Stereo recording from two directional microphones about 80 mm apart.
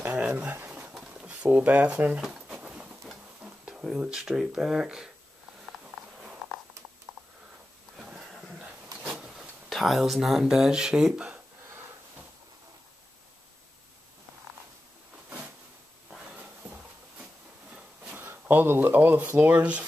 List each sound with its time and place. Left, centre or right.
0.0 s pigeon: right
8.0 s a sound: centre
9.1 s vehicle: centre
9.7 s speech: centre
16.1 s a sound: centre
17.7 s speech: right